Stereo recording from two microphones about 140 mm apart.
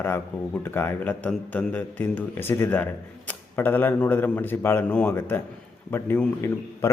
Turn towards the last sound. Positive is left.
turn(degrees=15)  # may be behind; listen again after turning